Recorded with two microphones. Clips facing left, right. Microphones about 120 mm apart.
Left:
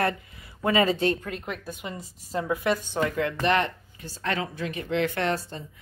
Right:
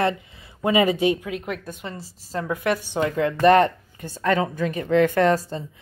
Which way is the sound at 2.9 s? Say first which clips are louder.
Right 4 dB; 25° right (ahead or behind).